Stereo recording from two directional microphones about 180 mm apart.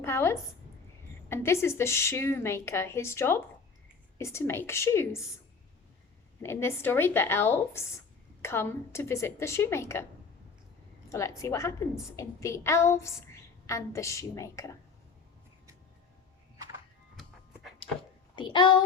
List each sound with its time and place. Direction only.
0.0 s speech: 15° left (ahead or behind)
6.4 s speech: 15° left (ahead or behind)
11.1 s speech: 15° left (ahead or behind)
17.2 s music: centre (ahead or behind)
18.3 s a child's voice: 25° left (ahead or behind)